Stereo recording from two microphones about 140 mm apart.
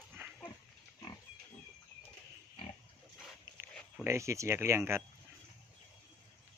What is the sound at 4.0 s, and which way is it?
Speech, 20° right (ahead or behind).